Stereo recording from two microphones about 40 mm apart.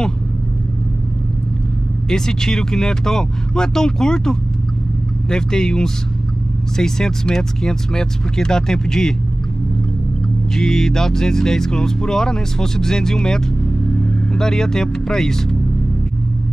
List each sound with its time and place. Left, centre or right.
2.0 s speech: centre
10.5 s speech: centre
13.9 s vehicle: left
14.4 s speech: centre